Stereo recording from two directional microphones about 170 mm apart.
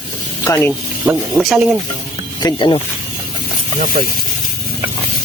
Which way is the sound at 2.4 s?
25° left (ahead or behind).